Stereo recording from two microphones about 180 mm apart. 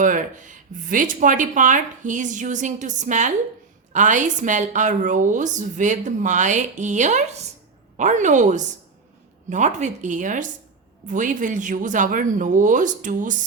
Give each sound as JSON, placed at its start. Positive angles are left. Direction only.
{"t": 0.0, "sound": "a woman's voice", "side_deg": -45}